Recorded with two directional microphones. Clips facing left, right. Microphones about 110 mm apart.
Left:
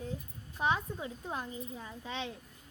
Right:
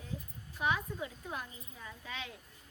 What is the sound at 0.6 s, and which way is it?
A child's voice, 30° left (ahead or behind).